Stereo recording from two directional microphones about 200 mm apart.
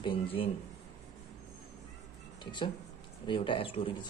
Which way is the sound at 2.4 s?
25° left (ahead or behind).